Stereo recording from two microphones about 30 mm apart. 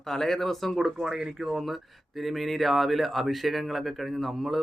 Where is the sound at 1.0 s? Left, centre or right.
Centre.